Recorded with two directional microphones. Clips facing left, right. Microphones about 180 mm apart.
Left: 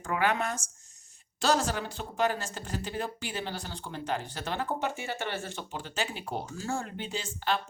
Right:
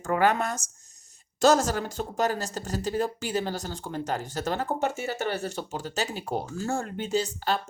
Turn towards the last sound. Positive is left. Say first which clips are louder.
# right 5 dB
turn(degrees=-40)  # may be behind; listen again after turning